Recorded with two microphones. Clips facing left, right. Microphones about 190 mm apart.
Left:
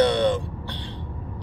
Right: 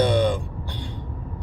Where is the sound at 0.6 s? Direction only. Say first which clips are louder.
Right 1 dB; 10° right (ahead or behind).